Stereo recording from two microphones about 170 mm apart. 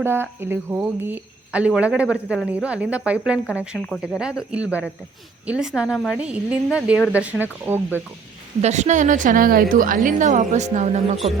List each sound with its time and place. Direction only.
0.0 s a woman's voice: 15° right (ahead or behind)
8.6 s a woman's voice: 45° right (ahead or behind)